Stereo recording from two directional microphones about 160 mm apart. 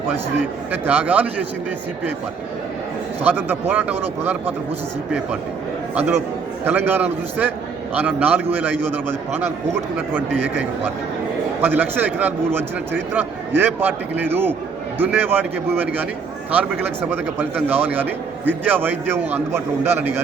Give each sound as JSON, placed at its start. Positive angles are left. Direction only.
{"t": 0.7, "sound": "a man's voice", "side_deg": -10}
{"t": 3.2, "sound": "a man's voice", "side_deg": -10}
{"t": 6.7, "sound": "a man's voice", "side_deg": -10}
{"t": 17.1, "sound": "a man's voice", "side_deg": -10}